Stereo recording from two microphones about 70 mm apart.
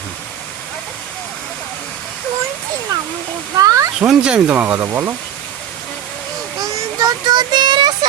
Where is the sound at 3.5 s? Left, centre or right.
Right.